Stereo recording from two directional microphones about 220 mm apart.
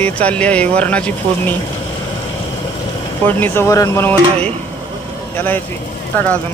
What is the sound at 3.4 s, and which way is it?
Speech, 15° left (ahead or behind).